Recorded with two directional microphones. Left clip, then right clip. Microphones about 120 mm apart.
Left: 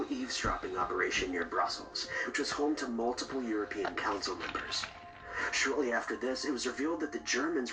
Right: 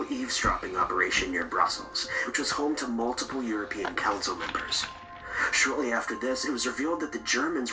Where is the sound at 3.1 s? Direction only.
30° right (ahead or behind).